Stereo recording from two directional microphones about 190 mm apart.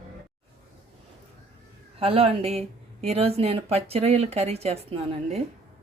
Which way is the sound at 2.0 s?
30° right (ahead or behind).